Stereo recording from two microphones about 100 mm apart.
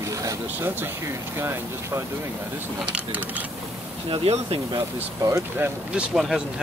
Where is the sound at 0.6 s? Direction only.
20° right (ahead or behind).